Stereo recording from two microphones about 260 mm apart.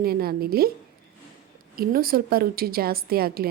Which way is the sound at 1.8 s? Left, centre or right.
Right.